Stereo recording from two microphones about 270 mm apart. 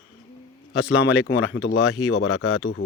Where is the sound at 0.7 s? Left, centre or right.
Left.